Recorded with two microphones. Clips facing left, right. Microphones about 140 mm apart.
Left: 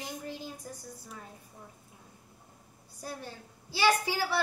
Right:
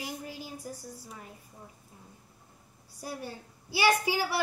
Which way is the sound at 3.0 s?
10° right (ahead or behind).